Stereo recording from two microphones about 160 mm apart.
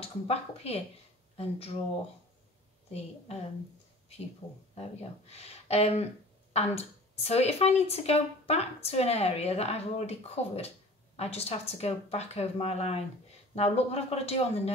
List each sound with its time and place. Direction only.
0.0 s speech: 40° left (ahead or behind)
5.3 s speech: 40° left (ahead or behind)